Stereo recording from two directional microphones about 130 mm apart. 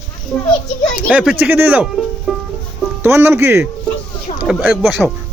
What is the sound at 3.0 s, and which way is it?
Speech, 20° right (ahead or behind).